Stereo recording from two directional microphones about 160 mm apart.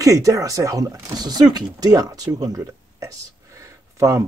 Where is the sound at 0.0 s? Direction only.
20° right (ahead or behind).